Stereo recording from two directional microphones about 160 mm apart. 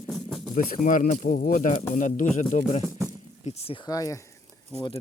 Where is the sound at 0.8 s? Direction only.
55° left (ahead or behind).